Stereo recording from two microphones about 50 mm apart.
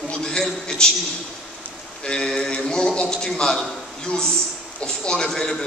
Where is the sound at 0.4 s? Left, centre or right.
Centre.